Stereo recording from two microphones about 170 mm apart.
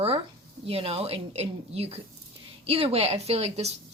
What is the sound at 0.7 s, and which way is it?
Speech, 35° right (ahead or behind).